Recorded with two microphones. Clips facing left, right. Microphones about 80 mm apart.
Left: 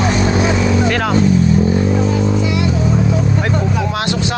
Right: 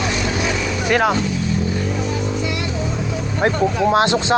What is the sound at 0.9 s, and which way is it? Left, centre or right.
Speech, centre.